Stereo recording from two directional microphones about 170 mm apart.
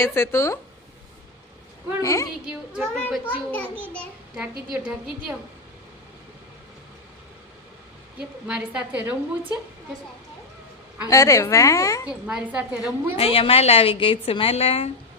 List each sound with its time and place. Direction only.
0.0 s a woman's voice: 15° left (ahead or behind)
2.0 s a woman's voice: 20° left (ahead or behind)
2.5 s a woman's voice: 10° right (ahead or behind)
2.9 s a woman's voice: 5° left (ahead or behind)
4.7 s a woman's voice: 5° right (ahead or behind)
8.4 s a woman's voice: 5° right (ahead or behind)
11.0 s a woman's voice: 20° left (ahead or behind)
12.2 s a woman's voice: 10° right (ahead or behind)
13.1 s a woman's voice: 35° left (ahead or behind)